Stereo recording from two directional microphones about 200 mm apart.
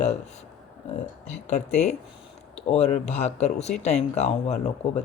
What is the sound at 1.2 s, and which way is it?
Speech, 35° left (ahead or behind).